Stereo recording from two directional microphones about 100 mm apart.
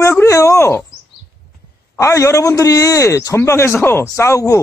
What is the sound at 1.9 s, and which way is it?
Speech, 30° left (ahead or behind).